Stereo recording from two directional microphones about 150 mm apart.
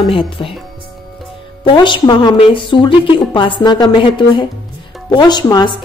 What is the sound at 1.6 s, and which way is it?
A woman's voice, 30° left (ahead or behind).